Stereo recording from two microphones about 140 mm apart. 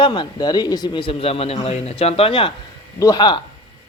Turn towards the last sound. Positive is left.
turn(degrees=30)  # may be behind; listen again after turning